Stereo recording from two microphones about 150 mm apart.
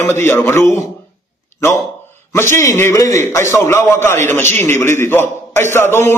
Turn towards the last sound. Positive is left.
turn(degrees=15)  # may be behind; listen again after turning